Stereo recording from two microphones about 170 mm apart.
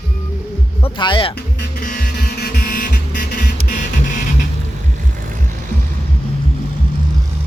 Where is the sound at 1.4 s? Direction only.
70° left (ahead or behind).